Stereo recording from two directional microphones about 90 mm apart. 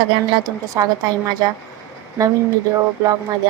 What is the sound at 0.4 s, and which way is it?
Speech, 40° right (ahead or behind).